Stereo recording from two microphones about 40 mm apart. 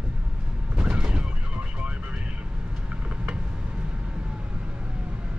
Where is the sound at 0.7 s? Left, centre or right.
Right.